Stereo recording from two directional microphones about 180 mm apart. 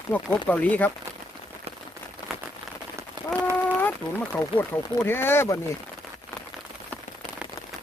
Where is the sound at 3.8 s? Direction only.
10° left (ahead or behind).